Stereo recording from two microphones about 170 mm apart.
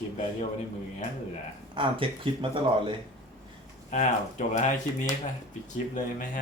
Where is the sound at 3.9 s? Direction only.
45° left (ahead or behind).